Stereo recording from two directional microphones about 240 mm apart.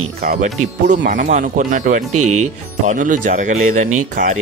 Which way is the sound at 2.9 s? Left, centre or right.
Right.